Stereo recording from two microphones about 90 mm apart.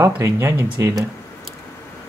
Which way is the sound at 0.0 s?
35° right (ahead or behind).